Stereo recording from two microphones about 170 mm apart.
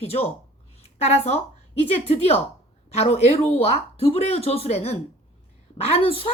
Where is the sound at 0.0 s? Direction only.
35° left (ahead or behind).